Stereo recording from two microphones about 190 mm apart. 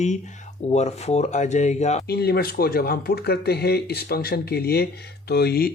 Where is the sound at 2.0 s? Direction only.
55° left (ahead or behind).